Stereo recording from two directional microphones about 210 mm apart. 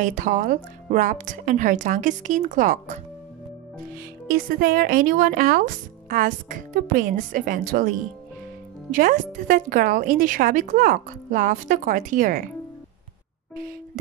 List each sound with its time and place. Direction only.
0.0 s speech: 40° right (ahead or behind)
4.3 s speech: 45° right (ahead or behind)
8.9 s speech: 40° right (ahead or behind)